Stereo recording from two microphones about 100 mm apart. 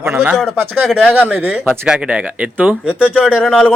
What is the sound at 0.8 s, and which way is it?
Speech, centre (ahead or behind).